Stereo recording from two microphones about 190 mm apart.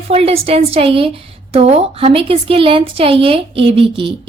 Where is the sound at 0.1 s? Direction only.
30° right (ahead or behind).